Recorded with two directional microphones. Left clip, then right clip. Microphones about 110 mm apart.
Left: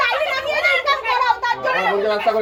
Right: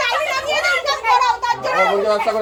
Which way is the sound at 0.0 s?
35° right (ahead or behind).